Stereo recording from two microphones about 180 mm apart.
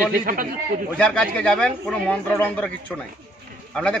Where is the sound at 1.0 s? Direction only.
5° left (ahead or behind).